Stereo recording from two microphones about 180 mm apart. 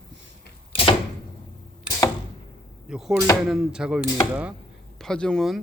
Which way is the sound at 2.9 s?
5° right (ahead or behind).